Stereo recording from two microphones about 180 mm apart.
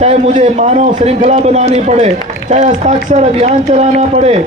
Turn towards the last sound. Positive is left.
turn(degrees=-35)  # may be behind; listen again after turning